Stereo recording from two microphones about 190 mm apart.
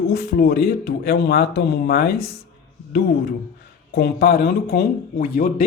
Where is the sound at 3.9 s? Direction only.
55° left (ahead or behind).